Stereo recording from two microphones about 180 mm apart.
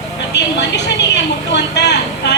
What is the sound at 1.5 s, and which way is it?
Vehicle, 75° left (ahead or behind).